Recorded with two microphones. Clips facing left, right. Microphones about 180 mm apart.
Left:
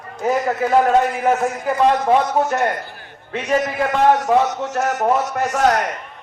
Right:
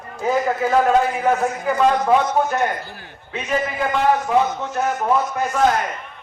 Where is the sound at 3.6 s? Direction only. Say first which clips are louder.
Left 2 dB; 75° left (ahead or behind).